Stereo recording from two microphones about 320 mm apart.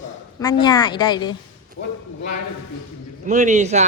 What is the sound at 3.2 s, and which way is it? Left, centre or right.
Speech, right.